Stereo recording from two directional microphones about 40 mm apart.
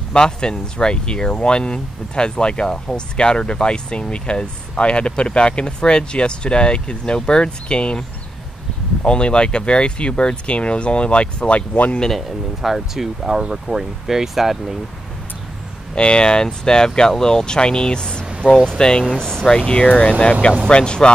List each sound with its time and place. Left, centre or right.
0.1 s speech: left
9.0 s speech: left
12.6 s speech: centre
15.9 s speech: left
18.4 s speech: left
18.8 s speech: centre